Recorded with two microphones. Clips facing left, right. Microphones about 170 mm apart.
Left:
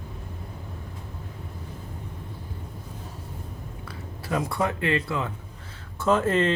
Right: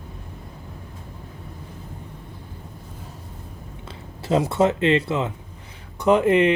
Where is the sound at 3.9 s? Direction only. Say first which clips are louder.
Right 7 dB; 25° right (ahead or behind).